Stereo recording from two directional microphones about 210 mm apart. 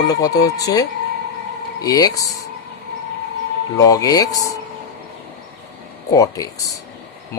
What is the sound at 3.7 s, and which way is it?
Speech, 15° left (ahead or behind).